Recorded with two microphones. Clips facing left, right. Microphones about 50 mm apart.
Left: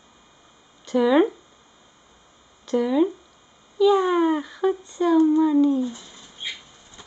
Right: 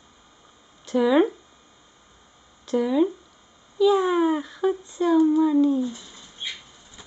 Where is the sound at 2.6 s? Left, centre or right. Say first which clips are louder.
Left 1 dB; centre.